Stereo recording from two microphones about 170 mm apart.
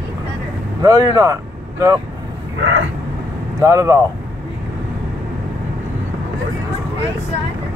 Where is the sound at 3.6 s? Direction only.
20° right (ahead or behind).